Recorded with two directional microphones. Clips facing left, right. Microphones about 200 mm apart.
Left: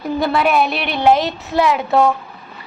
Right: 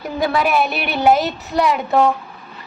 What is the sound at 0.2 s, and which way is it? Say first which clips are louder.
A woman's voice: left 1 dB; centre (ahead or behind).